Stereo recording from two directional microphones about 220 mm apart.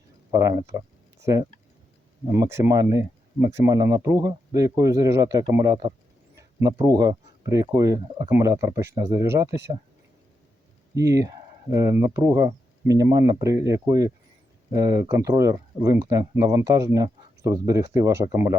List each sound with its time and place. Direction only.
0.3 s speech: 15° right (ahead or behind)
10.9 s speech: 15° right (ahead or behind)